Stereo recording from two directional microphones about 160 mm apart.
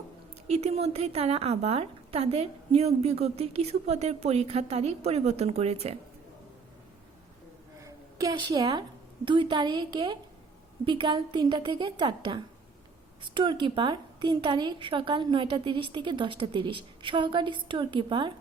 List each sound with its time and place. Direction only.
0.4 s a woman's voice: 40° right (ahead or behind)
7.8 s a sound: 20° right (ahead or behind)
9.2 s a woman's voice: 30° right (ahead or behind)